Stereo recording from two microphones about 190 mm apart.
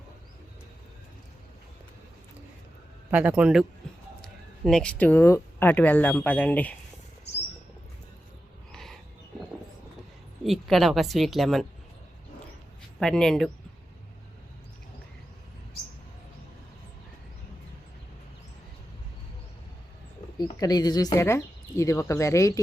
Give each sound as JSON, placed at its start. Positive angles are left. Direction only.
{"t": 3.1, "sound": "speech", "side_deg": -5}
{"t": 8.7, "sound": "a sound", "side_deg": 0}
{"t": 10.4, "sound": "a woman's voice", "side_deg": 0}
{"t": 13.0, "sound": "a woman's voice", "side_deg": 5}
{"t": 20.4, "sound": "speech", "side_deg": 20}